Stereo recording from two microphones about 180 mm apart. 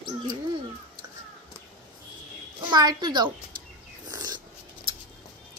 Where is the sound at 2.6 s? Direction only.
25° right (ahead or behind).